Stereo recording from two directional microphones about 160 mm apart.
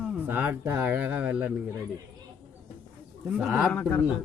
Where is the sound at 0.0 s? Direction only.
10° right (ahead or behind).